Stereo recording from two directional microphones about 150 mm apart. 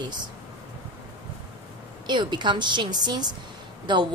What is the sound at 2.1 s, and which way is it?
A woman's voice, 30° right (ahead or behind).